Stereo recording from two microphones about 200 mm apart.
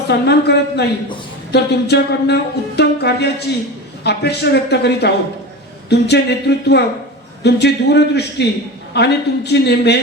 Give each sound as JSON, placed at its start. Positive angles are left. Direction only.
{"t": 0.1, "sound": "speech", "side_deg": 55}